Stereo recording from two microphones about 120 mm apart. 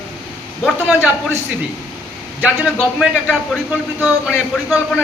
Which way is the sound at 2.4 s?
10° right (ahead or behind).